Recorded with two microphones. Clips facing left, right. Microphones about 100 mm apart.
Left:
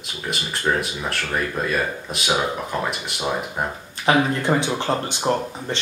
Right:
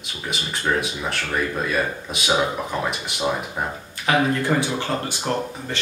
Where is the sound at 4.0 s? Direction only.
20° left (ahead or behind).